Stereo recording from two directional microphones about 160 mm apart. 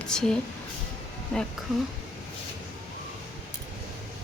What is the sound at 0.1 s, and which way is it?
A woman's voice, 5° left (ahead or behind).